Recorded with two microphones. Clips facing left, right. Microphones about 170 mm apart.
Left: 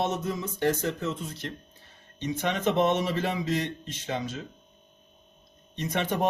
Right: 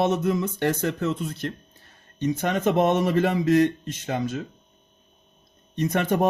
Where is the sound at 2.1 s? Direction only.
45° right (ahead or behind).